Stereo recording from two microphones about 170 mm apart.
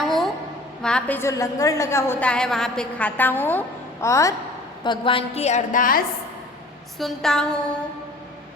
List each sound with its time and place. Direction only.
0.0 s a sound: centre (ahead or behind)
0.8 s a woman's voice: 5° left (ahead or behind)
4.8 s a woman's voice: 30° left (ahead or behind); by 6.0 s 50° left (ahead or behind)
7.0 s a woman's voice: 5° left (ahead or behind)